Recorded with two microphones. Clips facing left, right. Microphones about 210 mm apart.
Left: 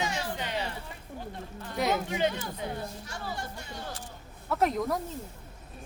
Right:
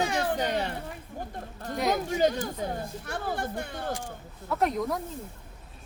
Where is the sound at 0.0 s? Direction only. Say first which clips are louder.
Right 6 dB; 55° right (ahead or behind).